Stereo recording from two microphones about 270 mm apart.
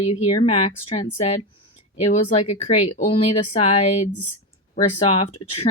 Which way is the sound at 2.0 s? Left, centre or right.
Left.